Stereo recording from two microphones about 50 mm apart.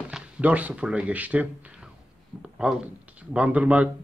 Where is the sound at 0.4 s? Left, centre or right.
Right.